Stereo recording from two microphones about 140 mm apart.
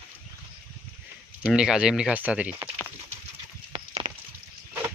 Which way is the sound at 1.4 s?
Centre (ahead or behind).